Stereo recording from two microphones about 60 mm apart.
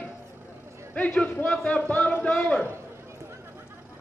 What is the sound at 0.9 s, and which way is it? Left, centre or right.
A man's voice, left.